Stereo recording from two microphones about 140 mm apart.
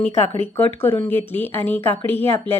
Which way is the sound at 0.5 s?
15° left (ahead or behind).